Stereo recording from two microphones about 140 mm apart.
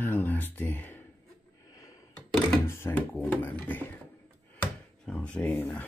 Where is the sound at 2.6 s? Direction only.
20° left (ahead or behind).